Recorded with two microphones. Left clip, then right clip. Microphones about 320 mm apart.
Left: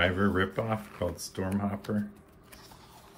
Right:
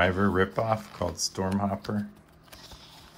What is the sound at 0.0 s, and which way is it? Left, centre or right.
Speech, centre.